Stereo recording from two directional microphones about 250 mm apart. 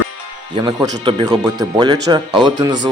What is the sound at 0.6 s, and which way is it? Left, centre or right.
Speech, centre.